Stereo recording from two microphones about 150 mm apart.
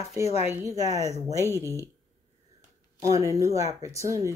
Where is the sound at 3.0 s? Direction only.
20° right (ahead or behind).